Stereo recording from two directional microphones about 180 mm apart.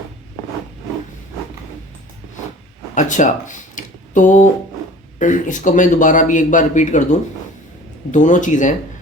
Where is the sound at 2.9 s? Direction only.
45° left (ahead or behind).